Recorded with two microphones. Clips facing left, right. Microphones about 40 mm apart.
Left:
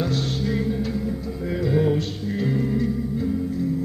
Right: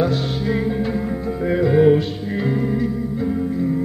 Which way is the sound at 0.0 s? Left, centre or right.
Centre.